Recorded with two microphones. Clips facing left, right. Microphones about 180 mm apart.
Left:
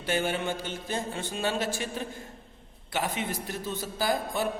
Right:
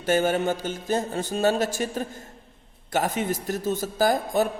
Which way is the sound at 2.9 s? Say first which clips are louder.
Right 6 dB; 45° right (ahead or behind).